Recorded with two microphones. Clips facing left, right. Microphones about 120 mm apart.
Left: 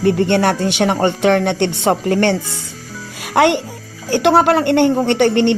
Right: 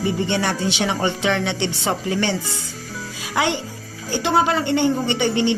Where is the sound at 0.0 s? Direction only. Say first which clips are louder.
Left 7 dB; 65° left (ahead or behind).